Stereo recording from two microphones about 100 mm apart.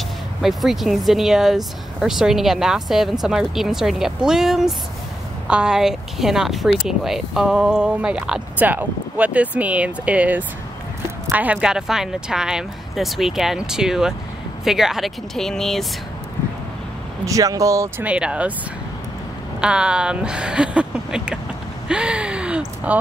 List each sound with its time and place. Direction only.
0.4 s speech: centre (ahead or behind)
17.2 s speech: 35° right (ahead or behind)
18.0 s speech: 10° right (ahead or behind)
19.6 s speech: 10° right (ahead or behind)
21.8 s gasp: 10° right (ahead or behind)